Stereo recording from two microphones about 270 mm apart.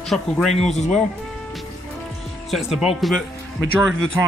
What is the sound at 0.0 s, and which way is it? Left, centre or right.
Speech, centre.